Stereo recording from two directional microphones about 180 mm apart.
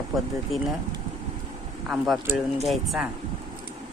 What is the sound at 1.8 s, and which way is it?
Speech, 5° right (ahead or behind).